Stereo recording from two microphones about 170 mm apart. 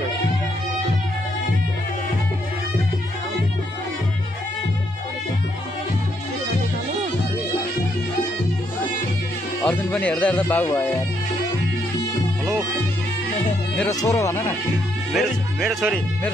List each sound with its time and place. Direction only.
9.7 s speech: 5° left (ahead or behind)
13.8 s speech: 20° left (ahead or behind)
15.1 s speech: centre (ahead or behind)